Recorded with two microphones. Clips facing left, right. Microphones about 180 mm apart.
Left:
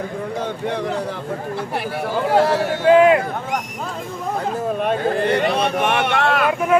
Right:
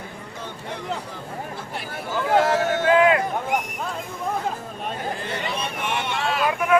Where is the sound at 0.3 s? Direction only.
75° left (ahead or behind).